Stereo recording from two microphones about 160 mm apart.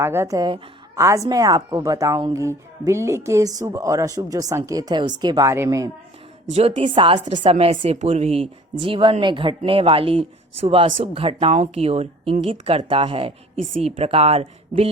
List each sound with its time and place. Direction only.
0.0 s a woman's voice: 15° right (ahead or behind)
6.5 s speech: 40° right (ahead or behind)